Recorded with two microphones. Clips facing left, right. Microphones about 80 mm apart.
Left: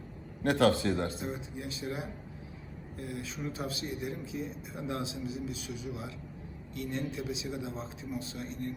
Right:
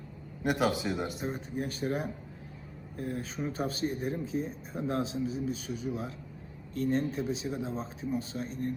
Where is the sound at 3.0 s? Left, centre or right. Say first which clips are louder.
Right 4 dB; right.